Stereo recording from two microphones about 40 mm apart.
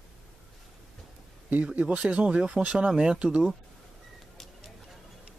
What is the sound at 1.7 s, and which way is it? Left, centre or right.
Speech, right.